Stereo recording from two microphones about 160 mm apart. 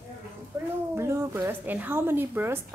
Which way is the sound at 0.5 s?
15° right (ahead or behind).